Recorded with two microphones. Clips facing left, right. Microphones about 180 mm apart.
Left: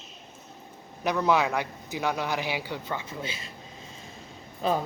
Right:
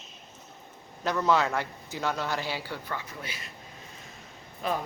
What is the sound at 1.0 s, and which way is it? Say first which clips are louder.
A man's voice: left 1 dB; 15° left (ahead or behind).